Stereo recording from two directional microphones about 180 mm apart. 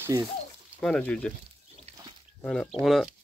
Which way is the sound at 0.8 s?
5° left (ahead or behind).